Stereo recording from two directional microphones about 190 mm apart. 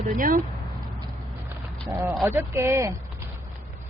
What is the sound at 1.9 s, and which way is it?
Speech, 10° right (ahead or behind).